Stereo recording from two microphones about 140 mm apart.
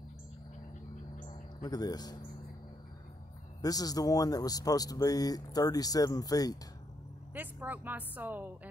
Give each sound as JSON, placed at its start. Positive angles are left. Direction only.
{"t": 1.3, "sound": "a sound", "side_deg": 30}
{"t": 3.6, "sound": "speech", "side_deg": 25}
{"t": 7.3, "sound": "a woman's voice", "side_deg": -15}